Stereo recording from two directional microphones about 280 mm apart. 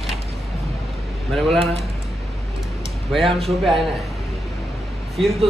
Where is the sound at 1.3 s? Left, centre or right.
Centre.